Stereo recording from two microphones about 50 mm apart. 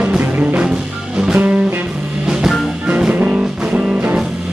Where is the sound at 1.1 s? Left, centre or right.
Centre.